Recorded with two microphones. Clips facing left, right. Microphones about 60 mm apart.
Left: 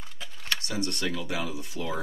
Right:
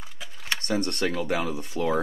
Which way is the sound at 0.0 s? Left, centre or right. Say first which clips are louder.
Right 1 dB; centre.